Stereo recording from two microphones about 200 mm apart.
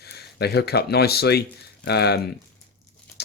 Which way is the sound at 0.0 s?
55° left (ahead or behind).